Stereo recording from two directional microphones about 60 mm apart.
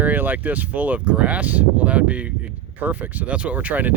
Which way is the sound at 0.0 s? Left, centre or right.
Right.